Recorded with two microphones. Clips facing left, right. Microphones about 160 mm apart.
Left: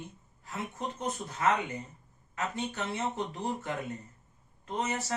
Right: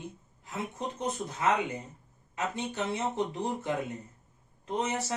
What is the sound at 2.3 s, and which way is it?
Speech, 15° right (ahead or behind).